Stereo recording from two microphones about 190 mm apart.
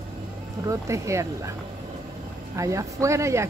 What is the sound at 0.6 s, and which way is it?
Speech, 15° right (ahead or behind).